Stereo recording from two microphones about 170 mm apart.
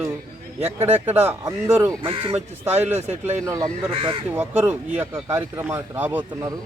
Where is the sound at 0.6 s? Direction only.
40° right (ahead or behind).